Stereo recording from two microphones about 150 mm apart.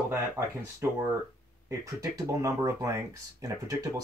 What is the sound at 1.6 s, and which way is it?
Speech, 20° right (ahead or behind).